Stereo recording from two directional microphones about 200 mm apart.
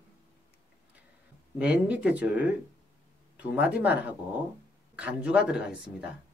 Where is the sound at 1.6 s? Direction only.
5° right (ahead or behind).